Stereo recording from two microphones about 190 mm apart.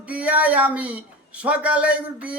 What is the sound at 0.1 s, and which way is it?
Speech, 10° right (ahead or behind).